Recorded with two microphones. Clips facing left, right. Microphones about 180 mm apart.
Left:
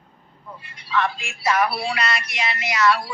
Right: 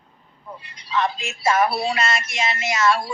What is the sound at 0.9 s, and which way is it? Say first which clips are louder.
Speech: even; 20° right (ahead or behind).